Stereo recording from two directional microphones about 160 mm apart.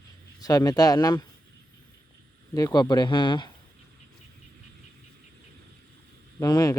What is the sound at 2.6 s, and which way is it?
Speech, 25° left (ahead or behind).